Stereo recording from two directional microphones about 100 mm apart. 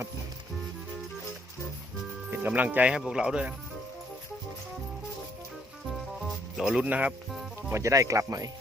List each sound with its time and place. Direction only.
2.3 s speech: 20° right (ahead or behind)
6.1 s music: 5° right (ahead or behind)
7.7 s speech: 30° right (ahead or behind)